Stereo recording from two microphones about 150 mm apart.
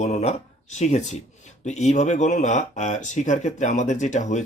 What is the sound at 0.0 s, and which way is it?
Speech, 50° left (ahead or behind).